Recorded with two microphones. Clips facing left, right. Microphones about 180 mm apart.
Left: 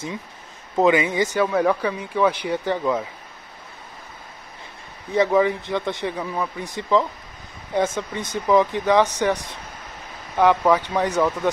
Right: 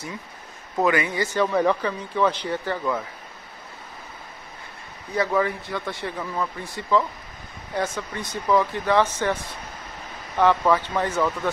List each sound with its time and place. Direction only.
0.7 s speech: 20° left (ahead or behind)
1.4 s speech: 5° left (ahead or behind)
5.1 s speech: 20° left (ahead or behind)